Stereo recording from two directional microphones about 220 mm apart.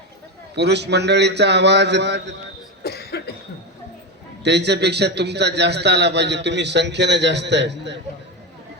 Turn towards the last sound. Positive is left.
turn(degrees=-50)  # may be behind; listen again after turning